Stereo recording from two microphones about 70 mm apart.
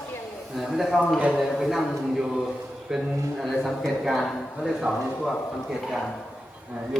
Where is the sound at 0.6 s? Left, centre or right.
Centre.